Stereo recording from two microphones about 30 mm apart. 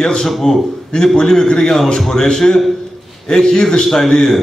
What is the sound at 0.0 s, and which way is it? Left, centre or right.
Speech, centre.